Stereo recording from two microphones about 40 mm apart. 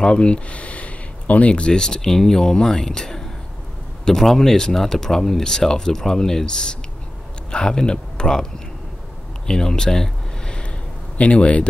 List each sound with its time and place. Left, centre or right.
0.0 s a sound: left
1.5 s speech: left
9.5 s speech: centre
11.1 s speech: left